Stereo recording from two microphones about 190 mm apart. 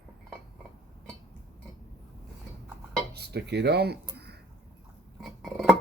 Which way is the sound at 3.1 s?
60° right (ahead or behind).